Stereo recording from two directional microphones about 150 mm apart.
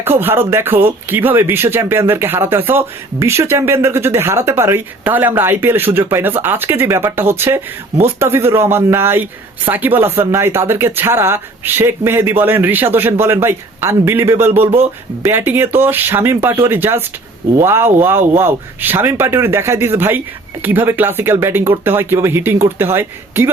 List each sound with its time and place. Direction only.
0.0 s speech: 15° right (ahead or behind)